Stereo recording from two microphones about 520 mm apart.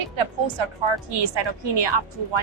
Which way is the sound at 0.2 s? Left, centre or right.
Right.